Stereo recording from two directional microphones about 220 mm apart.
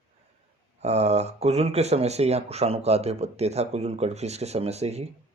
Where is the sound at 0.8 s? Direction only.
30° right (ahead or behind).